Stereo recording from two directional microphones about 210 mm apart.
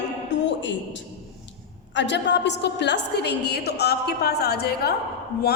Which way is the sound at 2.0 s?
55° left (ahead or behind).